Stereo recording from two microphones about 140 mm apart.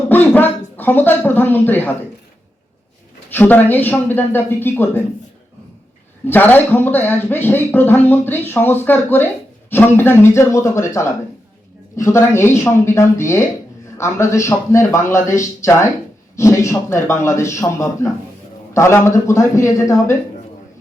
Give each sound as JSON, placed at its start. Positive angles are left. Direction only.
{"t": 0.1, "sound": "speech", "side_deg": 15}
{"t": 3.2, "sound": "speech", "side_deg": 15}
{"t": 6.2, "sound": "a man's voice", "side_deg": 15}